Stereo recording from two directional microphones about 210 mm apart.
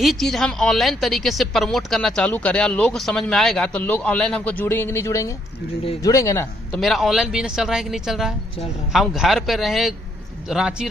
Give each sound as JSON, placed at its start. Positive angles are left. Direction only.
{"t": 0.0, "sound": "a woman's voice", "side_deg": 0}
{"t": 6.7, "sound": "a woman's voice", "side_deg": 0}